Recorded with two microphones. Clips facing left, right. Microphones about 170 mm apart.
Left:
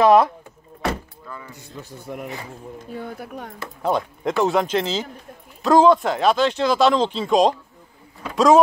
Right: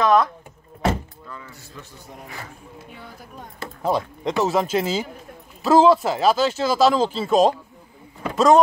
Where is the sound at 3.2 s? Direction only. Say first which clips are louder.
Left 7 dB; 70° left (ahead or behind).